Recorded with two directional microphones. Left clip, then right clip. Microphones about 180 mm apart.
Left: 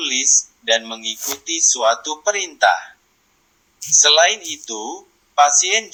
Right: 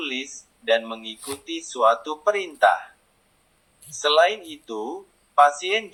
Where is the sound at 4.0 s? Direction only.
30° left (ahead or behind).